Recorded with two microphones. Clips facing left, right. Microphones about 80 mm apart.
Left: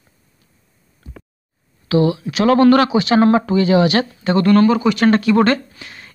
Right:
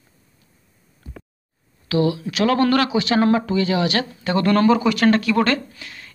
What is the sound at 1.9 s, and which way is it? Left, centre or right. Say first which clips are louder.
Speech: left 4 dB; centre.